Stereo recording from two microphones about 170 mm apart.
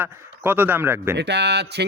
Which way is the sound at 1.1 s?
85° right.